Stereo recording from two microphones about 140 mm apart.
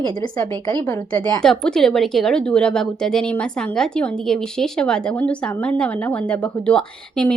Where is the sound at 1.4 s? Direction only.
5° left (ahead or behind).